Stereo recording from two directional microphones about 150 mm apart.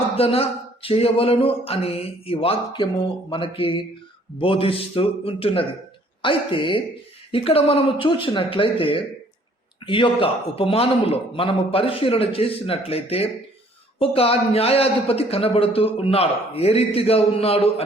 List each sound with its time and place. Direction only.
0.2 s a man's voice: 40° left (ahead or behind)